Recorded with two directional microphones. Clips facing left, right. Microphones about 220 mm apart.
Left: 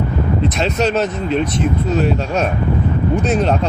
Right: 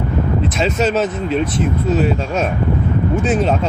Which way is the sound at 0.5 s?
Centre (ahead or behind).